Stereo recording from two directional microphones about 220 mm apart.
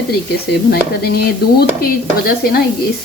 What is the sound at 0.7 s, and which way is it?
Speech, 45° left (ahead or behind).